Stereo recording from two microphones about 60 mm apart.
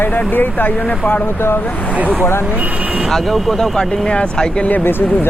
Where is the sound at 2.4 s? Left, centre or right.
Right.